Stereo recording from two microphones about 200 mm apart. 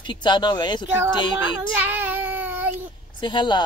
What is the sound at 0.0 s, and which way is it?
Speech, 25° left (ahead or behind).